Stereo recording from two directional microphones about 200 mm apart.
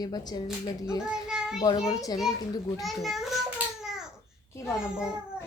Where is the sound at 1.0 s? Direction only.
5° right (ahead or behind).